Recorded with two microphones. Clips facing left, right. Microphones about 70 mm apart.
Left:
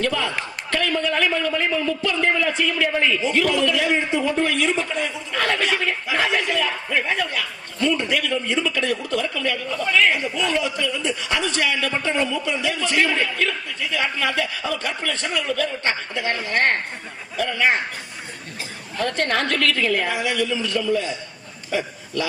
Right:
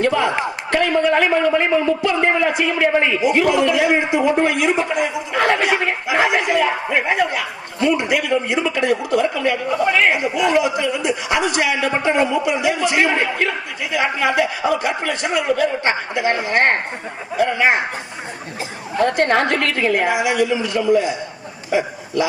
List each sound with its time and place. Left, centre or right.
0.0 s a man's voice: right
18.9 s a man's voice: right